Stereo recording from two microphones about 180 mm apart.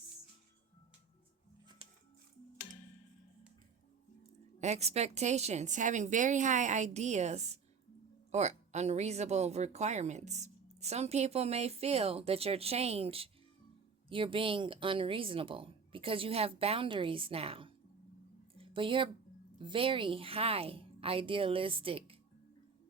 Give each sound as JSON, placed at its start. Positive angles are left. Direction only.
{"t": 4.6, "sound": "speech", "side_deg": -35}
{"t": 18.5, "sound": "a sound", "side_deg": -30}
{"t": 19.5, "sound": "speech", "side_deg": -30}